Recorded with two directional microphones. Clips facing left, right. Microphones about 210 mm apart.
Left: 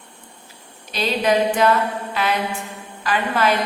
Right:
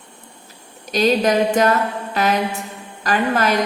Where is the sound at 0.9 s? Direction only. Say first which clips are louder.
Right 4 dB; 45° right (ahead or behind).